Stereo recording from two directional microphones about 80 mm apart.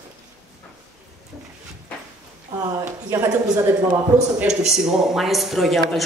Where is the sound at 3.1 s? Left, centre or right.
Right.